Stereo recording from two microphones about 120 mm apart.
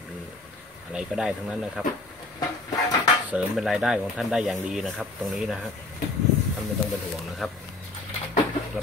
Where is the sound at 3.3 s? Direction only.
5° right (ahead or behind).